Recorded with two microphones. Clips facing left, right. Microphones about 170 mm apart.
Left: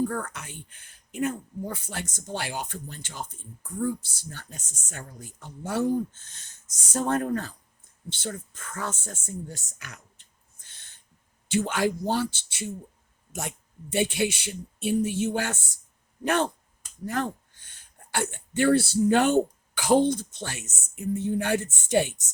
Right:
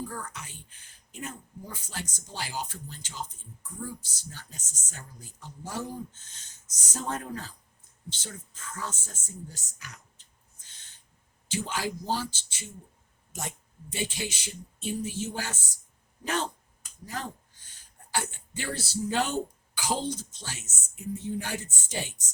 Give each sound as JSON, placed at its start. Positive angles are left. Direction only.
{"t": 0.1, "sound": "speech", "side_deg": 60}
{"t": 13.9, "sound": "speech", "side_deg": 60}